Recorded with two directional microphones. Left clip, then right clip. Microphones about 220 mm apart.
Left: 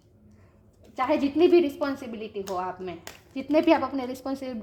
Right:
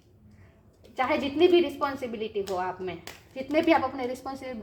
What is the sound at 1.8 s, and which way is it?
A woman's voice, 35° left (ahead or behind).